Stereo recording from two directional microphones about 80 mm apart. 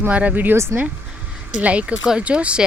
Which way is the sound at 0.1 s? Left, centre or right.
Centre.